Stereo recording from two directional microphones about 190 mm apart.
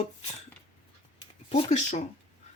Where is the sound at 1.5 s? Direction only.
35° left (ahead or behind).